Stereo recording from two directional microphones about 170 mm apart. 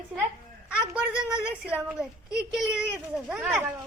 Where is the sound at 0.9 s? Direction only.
5° right (ahead or behind).